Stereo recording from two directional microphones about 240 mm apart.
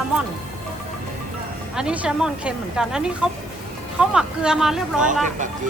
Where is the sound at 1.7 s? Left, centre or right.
Centre.